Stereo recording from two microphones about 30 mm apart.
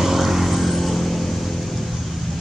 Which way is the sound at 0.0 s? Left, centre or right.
Centre.